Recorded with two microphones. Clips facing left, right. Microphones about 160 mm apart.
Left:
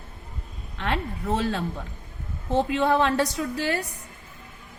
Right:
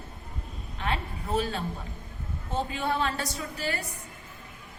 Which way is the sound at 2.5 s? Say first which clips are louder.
Left 8 dB; 75° left (ahead or behind).